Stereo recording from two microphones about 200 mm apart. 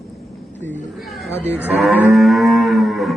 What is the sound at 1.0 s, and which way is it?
Speech, centre (ahead or behind).